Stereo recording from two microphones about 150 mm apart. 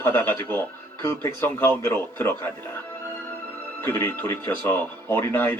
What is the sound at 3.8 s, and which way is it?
A man's voice, 15° left (ahead or behind).